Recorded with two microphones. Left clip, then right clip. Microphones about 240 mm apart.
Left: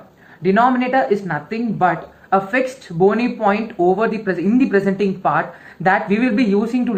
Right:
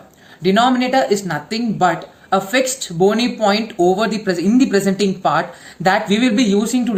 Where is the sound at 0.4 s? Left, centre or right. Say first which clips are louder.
Even; right.